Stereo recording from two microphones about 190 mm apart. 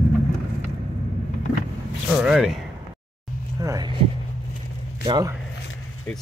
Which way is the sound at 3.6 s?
20° right (ahead or behind).